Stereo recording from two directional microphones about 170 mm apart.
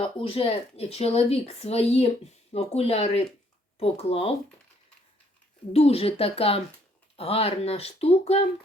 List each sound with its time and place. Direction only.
0.0 s speech: 30° left (ahead or behind)
5.7 s speech: 35° left (ahead or behind)